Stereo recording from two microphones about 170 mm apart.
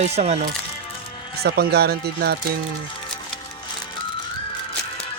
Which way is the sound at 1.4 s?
70° right (ahead or behind).